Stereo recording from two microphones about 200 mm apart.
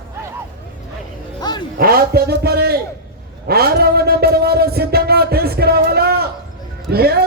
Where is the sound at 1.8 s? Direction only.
50° right (ahead or behind).